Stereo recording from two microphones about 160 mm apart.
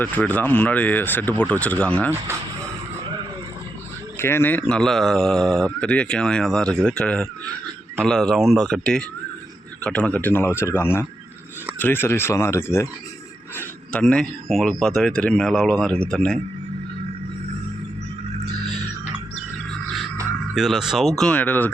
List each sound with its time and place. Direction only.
0.0 s speech: 10° left (ahead or behind)
2.0 s speech: 15° right (ahead or behind)
4.2 s speech: 15° left (ahead or behind)
20.6 s speech: 5° right (ahead or behind)